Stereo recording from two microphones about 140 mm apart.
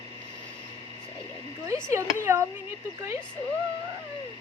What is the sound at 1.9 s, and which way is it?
Speech, 20° right (ahead or behind).